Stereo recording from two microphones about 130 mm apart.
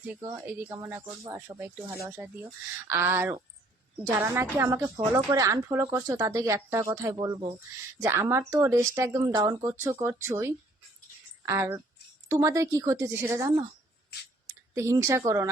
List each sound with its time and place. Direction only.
0.4 s a woman's voice: 15° right (ahead or behind); by 9.7 s 30° right (ahead or behind)
9.8 s a woman's voice: 20° right (ahead or behind)
14.4 s a sound: 20° right (ahead or behind)